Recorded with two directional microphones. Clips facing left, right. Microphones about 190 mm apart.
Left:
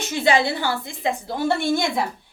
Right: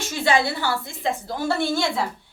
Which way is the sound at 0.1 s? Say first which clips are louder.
Left 2 dB; 20° left (ahead or behind).